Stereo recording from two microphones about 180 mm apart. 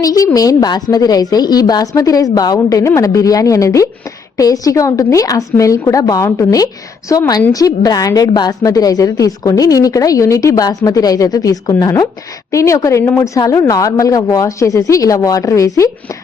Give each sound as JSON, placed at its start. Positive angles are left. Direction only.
{"t": 0.0, "sound": "a woman's voice", "side_deg": 20}